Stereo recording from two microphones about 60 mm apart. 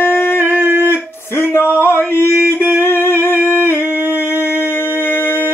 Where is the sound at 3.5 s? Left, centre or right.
Left.